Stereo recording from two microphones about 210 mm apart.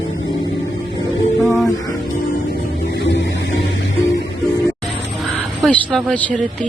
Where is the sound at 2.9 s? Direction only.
55° left (ahead or behind).